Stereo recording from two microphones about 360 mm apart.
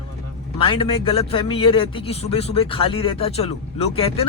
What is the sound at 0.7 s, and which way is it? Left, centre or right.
Speech, centre.